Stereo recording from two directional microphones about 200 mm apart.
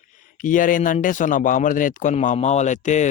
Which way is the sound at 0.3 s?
40° left (ahead or behind).